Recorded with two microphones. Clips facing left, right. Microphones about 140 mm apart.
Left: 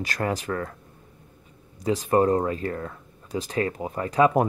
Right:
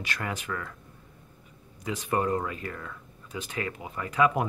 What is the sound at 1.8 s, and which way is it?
Speech, 35° left (ahead or behind).